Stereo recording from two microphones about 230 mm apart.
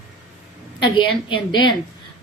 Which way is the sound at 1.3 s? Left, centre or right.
Left.